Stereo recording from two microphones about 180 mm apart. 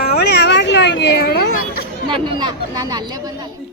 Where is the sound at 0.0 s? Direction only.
65° left (ahead or behind).